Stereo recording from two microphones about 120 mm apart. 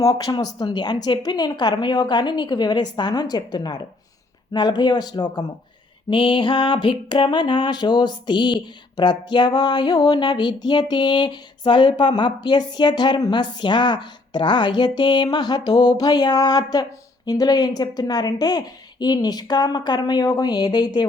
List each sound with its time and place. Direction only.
0.0 s female singing: 30° left (ahead or behind)
6.1 s female singing: 45° left (ahead or behind)